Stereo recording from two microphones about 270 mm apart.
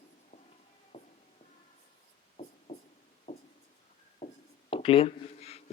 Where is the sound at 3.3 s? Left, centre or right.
Left.